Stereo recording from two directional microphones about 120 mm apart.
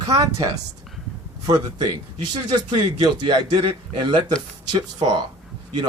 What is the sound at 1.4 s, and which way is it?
Speech, 30° right (ahead or behind).